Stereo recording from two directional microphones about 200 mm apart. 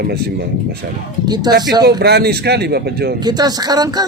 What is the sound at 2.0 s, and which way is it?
Speech, 55° right (ahead or behind).